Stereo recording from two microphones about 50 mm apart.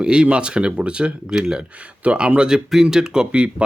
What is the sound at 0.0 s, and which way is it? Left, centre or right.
Speech, right.